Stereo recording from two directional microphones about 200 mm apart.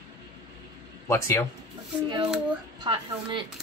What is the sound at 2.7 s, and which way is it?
Speech, 25° right (ahead or behind).